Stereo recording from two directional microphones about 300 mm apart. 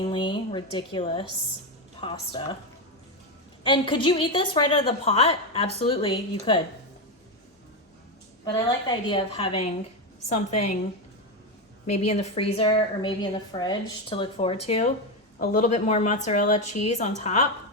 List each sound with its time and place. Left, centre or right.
0.0 s a woman's voice: centre
3.6 s a woman's voice: centre
8.5 s a woman's voice: centre
11.9 s a woman's voice: left